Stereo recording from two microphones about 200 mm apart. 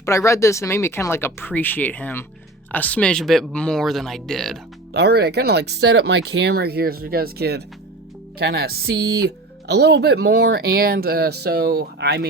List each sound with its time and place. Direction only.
0.0 s speech: 15° left (ahead or behind)
4.9 s speech: 55° right (ahead or behind)